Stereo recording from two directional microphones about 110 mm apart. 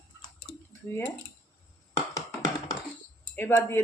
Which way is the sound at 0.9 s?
25° left (ahead or behind).